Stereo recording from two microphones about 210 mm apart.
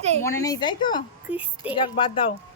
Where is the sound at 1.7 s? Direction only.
25° left (ahead or behind).